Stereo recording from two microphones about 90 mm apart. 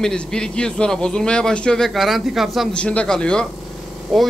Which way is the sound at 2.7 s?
15° left (ahead or behind).